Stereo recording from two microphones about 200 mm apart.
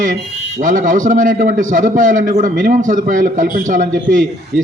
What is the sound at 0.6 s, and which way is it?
A man's voice, 40° right (ahead or behind).